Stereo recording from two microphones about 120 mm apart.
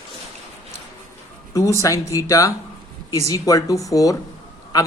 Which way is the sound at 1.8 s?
25° left (ahead or behind).